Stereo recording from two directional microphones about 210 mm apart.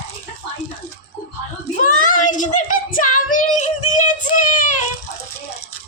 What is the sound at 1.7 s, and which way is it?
Screaming, 40° left (ahead or behind).